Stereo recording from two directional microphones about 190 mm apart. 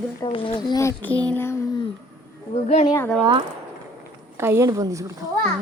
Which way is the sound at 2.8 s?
15° left (ahead or behind).